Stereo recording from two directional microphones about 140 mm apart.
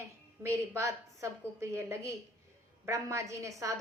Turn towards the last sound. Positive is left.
turn(degrees=-20)  # may be behind; listen again after turning